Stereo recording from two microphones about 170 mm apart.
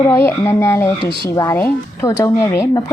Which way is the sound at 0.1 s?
15° left (ahead or behind).